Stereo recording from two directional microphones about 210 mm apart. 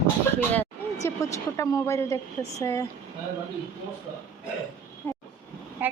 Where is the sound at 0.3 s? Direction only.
10° left (ahead or behind).